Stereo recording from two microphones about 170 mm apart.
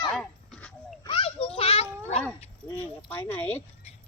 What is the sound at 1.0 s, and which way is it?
Children playing, 35° left (ahead or behind).